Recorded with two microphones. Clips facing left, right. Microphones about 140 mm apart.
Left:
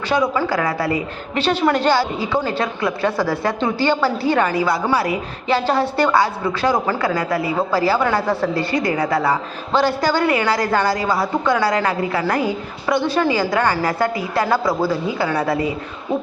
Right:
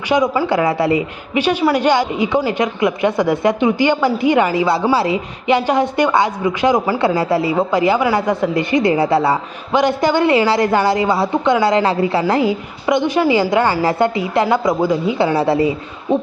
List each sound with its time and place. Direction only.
0.1 s a woman's voice: 15° right (ahead or behind)
1.3 s a woman's voice: 10° right (ahead or behind)
7.0 s a woman's voice: 25° right (ahead or behind)
12.8 s a woman's voice: 15° right (ahead or behind)